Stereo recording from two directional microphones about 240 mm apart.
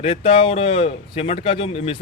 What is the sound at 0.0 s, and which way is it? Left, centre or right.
Speech, left.